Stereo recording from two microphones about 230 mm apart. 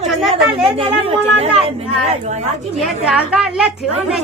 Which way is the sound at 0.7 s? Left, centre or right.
Right.